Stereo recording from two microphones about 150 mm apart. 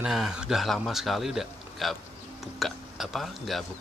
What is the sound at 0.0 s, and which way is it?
Speech, 5° right (ahead or behind).